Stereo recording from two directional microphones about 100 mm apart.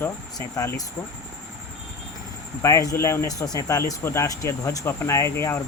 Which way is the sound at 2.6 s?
35° left (ahead or behind).